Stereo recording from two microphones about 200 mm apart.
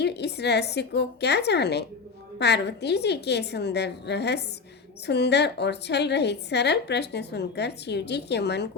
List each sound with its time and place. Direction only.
0.0 s a woman's voice: 55° left (ahead or behind)